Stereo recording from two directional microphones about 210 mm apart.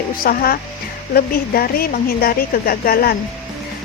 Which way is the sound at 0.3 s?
45° left (ahead or behind).